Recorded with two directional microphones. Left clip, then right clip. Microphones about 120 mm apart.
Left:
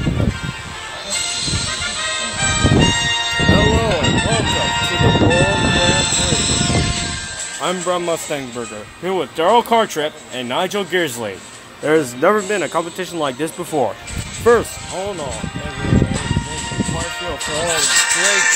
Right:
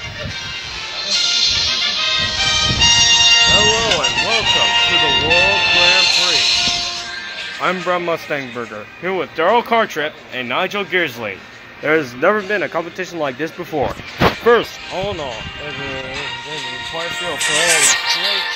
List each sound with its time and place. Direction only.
1.0 s music: 40° left (ahead or behind)
2.0 s music: 5° right (ahead or behind)
7.6 s speech: 15° left (ahead or behind)
9.0 s speech: 30° left (ahead or behind); by 11.3 s 55° left (ahead or behind)
11.8 s a man's voice: 30° left (ahead or behind); by 15.0 s 15° left (ahead or behind)
15.8 s music: centre (ahead or behind)
17.6 s speech: 25° right (ahead or behind)